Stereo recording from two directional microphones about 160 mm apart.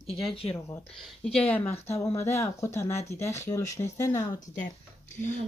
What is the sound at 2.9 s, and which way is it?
Speech, 45° left (ahead or behind).